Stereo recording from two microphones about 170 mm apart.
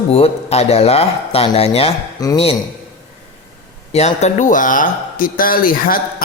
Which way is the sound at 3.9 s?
40° left (ahead or behind).